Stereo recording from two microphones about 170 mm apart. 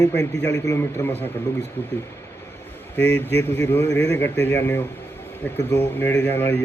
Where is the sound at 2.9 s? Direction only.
10° left (ahead or behind).